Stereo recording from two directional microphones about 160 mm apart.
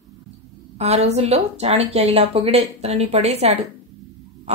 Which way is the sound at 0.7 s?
40° right (ahead or behind).